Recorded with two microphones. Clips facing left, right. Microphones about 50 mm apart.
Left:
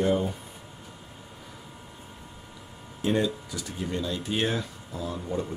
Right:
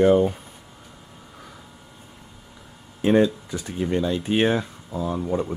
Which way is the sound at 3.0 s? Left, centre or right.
Right.